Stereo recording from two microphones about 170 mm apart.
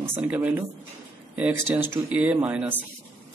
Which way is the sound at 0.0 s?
10° right (ahead or behind).